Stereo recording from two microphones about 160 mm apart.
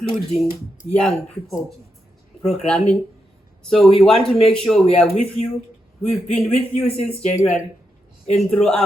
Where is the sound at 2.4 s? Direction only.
5° left (ahead or behind).